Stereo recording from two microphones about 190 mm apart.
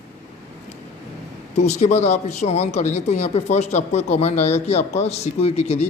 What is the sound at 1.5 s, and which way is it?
Speech, 35° left (ahead or behind).